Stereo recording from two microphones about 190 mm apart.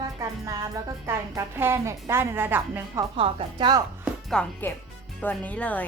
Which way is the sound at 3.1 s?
30° right (ahead or behind).